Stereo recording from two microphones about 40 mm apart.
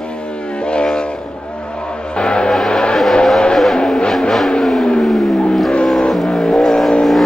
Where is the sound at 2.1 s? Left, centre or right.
Left.